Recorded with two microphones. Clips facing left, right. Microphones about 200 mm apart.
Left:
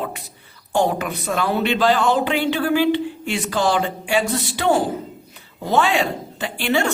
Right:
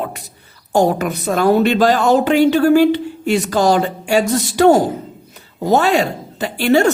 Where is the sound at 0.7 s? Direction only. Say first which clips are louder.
Right 5 dB; 40° right (ahead or behind).